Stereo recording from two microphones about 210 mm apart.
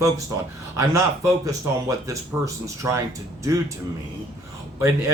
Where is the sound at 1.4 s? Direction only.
15° right (ahead or behind).